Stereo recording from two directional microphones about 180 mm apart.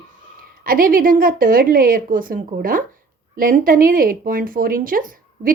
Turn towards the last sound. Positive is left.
turn(degrees=-50)  # may be behind; listen again after turning